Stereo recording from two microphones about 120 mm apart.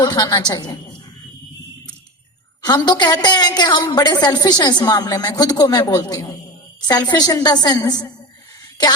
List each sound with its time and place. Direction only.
0.0 s a woman's voice: 35° left (ahead or behind)
2.6 s a woman's voice: 35° left (ahead or behind)